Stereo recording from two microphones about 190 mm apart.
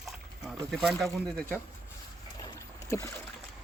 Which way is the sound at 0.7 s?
Centre (ahead or behind).